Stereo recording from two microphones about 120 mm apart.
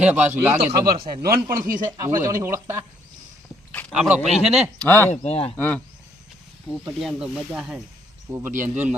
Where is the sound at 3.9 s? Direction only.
5° right (ahead or behind).